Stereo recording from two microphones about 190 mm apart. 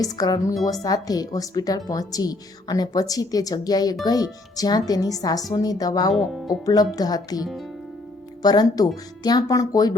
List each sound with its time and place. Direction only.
0.0 s a woman's voice: 20° left (ahead or behind)